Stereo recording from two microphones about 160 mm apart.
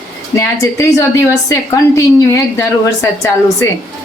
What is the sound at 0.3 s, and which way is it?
A woman's voice, 20° left (ahead or behind).